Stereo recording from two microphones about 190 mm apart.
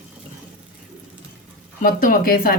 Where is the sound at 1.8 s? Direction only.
45° left (ahead or behind).